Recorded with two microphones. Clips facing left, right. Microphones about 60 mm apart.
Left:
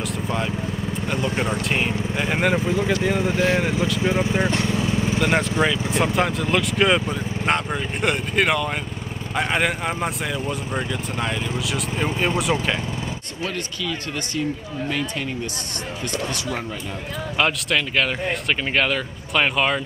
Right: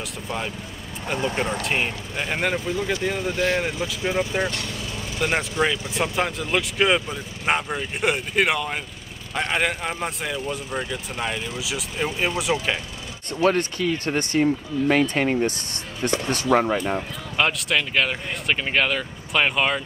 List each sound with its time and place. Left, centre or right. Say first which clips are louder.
1.0 s speech: right 1 dB; centre
1.3 s speech: left 1 dB; centre
2.5 s speech: left 4 dB; centre
6.1 s speech: left 3 dB; centre
13.4 s speech: right 9 dB; right
17.4 s speech: left 1 dB; centre